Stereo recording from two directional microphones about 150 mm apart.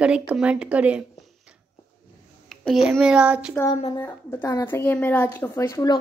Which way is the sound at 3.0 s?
5° right (ahead or behind).